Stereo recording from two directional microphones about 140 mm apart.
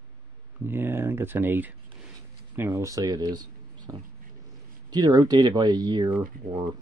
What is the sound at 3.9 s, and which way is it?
Speech, 20° right (ahead or behind).